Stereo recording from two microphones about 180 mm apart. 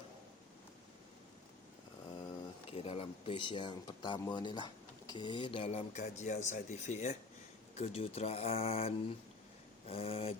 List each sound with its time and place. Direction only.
2.6 s speech: 35° left (ahead or behind)